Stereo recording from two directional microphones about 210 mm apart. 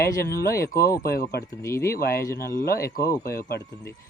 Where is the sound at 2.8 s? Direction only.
15° left (ahead or behind).